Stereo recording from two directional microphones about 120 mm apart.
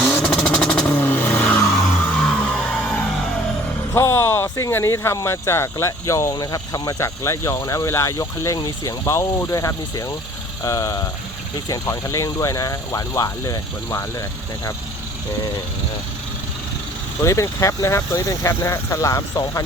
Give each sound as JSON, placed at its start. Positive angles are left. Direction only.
{"t": 0.0, "sound": "vehicle", "side_deg": 5}
{"t": 3.9, "sound": "speech", "side_deg": 25}
{"t": 17.2, "sound": "speech", "side_deg": 25}